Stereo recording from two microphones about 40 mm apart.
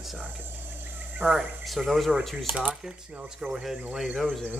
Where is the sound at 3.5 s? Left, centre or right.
Centre.